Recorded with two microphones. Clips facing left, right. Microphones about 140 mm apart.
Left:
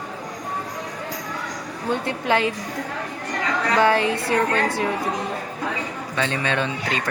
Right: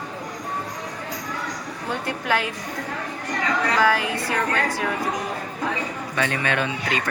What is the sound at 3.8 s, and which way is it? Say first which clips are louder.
Speech: left 2 dB; 25° left (ahead or behind).